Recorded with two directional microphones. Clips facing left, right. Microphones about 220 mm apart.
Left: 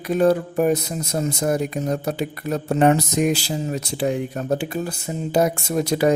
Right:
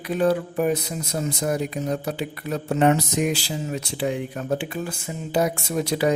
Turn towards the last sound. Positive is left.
turn(degrees=45)  # may be behind; listen again after turning